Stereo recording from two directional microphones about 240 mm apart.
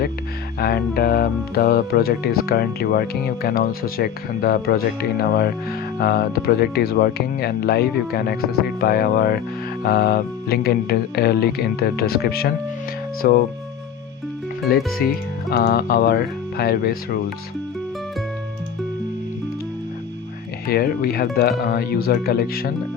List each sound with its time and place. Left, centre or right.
0.6 s speech: left
14.7 s speech: left
20.7 s speech: left